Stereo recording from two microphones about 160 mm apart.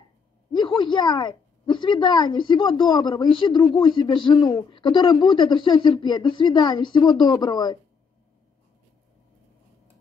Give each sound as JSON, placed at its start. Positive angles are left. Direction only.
{"t": 0.5, "sound": "a woman's voice", "side_deg": 30}